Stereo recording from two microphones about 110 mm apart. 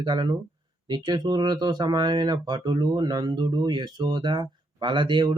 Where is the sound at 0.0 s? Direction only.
40° right (ahead or behind).